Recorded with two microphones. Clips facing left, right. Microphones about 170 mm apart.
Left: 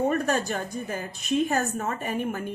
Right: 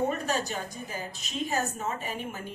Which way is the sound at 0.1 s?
55° left (ahead or behind).